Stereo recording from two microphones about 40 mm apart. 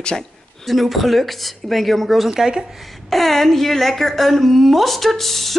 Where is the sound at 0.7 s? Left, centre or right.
Centre.